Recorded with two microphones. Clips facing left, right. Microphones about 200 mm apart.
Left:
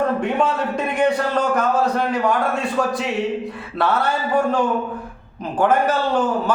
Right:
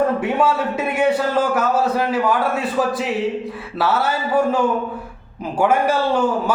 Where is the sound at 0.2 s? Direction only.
5° right (ahead or behind).